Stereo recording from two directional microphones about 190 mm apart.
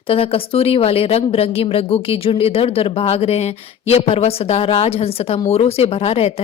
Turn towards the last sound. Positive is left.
turn(degrees=30)  # may be behind; listen again after turning